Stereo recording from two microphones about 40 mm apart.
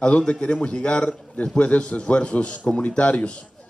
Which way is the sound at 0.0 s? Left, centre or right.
Left.